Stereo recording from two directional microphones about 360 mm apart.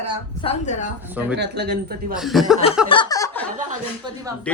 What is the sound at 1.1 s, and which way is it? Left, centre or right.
Speech, centre.